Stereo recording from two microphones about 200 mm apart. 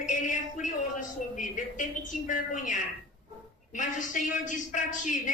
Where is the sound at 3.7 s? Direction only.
40° left (ahead or behind).